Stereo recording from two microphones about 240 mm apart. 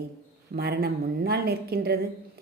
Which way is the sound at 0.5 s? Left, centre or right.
Right.